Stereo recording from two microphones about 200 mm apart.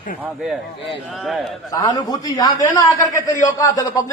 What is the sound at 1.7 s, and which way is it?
A man's voice, 20° left (ahead or behind).